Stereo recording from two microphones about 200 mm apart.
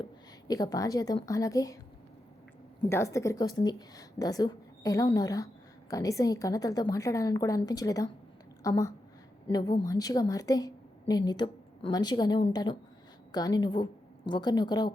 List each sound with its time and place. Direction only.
0.0 s a woman's voice: 20° left (ahead or behind)
2.9 s a woman's voice: 15° left (ahead or behind)